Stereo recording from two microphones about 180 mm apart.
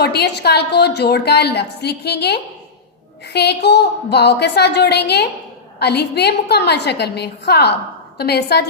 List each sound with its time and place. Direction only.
0.0 s a woman's voice: 65° left (ahead or behind)